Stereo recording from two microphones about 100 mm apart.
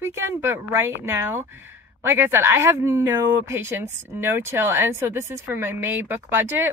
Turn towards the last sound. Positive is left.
turn(degrees=-20)  # may be behind; listen again after turning